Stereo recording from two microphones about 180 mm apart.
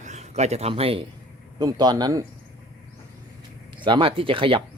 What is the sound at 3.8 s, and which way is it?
Speech, 30° right (ahead or behind).